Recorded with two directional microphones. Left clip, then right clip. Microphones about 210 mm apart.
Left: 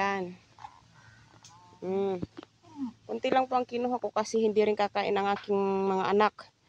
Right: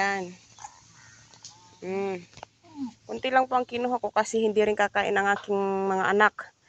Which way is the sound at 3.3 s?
10° right (ahead or behind).